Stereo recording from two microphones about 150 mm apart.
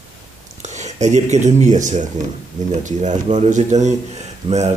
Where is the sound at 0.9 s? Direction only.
50° right (ahead or behind).